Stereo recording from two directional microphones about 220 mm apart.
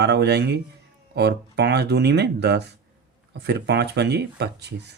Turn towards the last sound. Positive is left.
turn(degrees=-50)  # may be behind; listen again after turning